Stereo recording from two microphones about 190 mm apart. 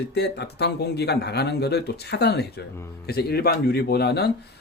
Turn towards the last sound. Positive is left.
turn(degrees=55)  # may be behind; listen again after turning